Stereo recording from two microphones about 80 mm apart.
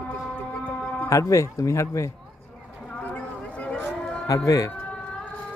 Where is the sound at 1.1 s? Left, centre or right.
Left.